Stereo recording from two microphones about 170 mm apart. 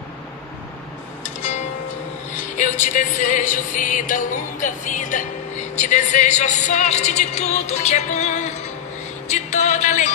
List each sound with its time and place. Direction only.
1.4 s music: 45° left (ahead or behind)
2.3 s speech: 45° left (ahead or behind)
9.3 s music: 45° left (ahead or behind)